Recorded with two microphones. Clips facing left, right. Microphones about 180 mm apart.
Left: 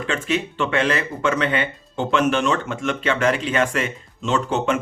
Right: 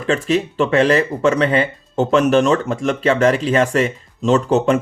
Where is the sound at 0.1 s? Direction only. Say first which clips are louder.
Right 7 dB; 35° right (ahead or behind).